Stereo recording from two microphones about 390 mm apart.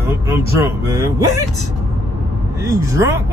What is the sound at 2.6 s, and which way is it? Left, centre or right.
Speech, centre.